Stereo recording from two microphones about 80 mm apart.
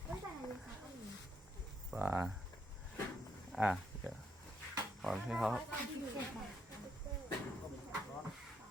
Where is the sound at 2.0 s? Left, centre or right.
Right.